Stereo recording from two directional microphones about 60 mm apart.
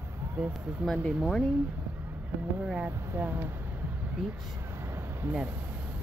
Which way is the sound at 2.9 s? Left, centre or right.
Right.